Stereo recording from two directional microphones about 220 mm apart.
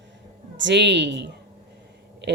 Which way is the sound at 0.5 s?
55° right (ahead or behind).